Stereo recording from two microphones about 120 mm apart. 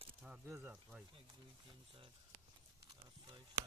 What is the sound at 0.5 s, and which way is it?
Speech, 10° right (ahead or behind).